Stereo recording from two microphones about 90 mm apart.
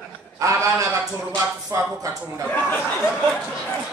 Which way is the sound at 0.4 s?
35° right (ahead or behind).